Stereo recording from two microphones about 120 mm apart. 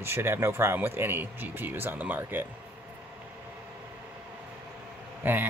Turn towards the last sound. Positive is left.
turn(degrees=-15)  # may be behind; listen again after turning